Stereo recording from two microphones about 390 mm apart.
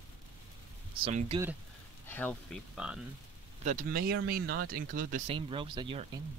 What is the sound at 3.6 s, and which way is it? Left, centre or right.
Speech, right.